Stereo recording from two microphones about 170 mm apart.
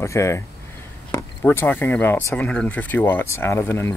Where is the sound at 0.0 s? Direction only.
15° left (ahead or behind).